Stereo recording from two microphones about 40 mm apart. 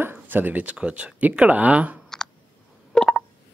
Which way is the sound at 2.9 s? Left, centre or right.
Centre.